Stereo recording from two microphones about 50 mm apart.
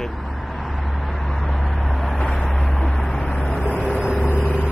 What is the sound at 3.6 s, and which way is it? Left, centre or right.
Vehicle, left.